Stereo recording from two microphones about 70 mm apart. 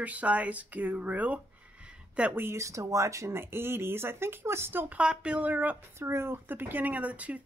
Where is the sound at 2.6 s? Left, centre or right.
Right.